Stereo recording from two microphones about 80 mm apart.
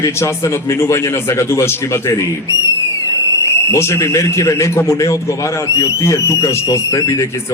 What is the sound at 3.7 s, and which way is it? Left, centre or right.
A man's voice, left.